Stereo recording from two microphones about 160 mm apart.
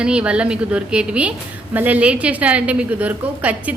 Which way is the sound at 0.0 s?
5° right (ahead or behind).